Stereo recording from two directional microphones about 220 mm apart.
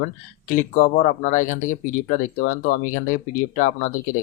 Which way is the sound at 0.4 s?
35° left (ahead or behind).